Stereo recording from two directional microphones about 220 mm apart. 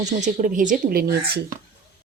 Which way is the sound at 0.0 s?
35° right (ahead or behind).